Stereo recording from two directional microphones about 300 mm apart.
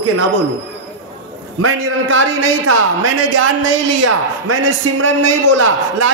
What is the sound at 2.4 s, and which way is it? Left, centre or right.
A man's voice, right.